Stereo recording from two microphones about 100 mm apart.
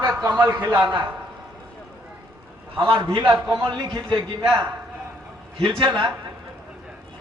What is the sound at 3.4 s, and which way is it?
Speech, 45° right (ahead or behind).